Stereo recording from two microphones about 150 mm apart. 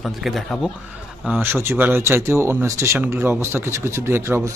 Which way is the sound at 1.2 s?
10° right (ahead or behind).